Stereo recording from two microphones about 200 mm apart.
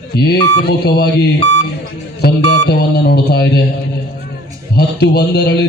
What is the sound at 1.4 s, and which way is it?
Speech, 35° left (ahead or behind).